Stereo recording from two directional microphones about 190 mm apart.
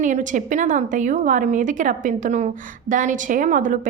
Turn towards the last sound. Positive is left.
turn(degrees=-45)  # may be behind; listen again after turning